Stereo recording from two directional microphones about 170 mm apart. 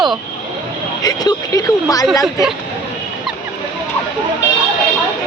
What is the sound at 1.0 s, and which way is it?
Speech, 25° left (ahead or behind).